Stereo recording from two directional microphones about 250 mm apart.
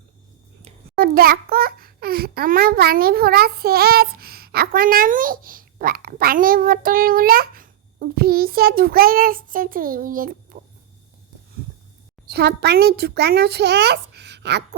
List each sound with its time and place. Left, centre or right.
0.6 s a child's voice: right
12.3 s a woman's voice: right